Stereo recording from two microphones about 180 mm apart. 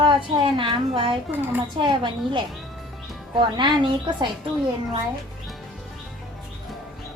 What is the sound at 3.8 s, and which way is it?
Speech, 25° right (ahead or behind).